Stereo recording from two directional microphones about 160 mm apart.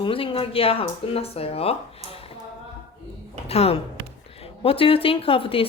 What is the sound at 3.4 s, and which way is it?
Speech, 40° left (ahead or behind).